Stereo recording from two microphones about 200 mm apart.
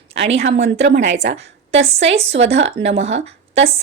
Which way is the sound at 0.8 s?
60° right (ahead or behind).